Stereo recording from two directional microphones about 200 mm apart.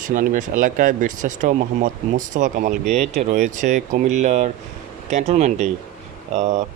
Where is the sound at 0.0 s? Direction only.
40° right (ahead or behind).